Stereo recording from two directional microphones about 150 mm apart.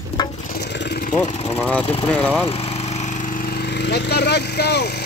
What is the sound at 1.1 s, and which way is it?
Speech, 50° left (ahead or behind).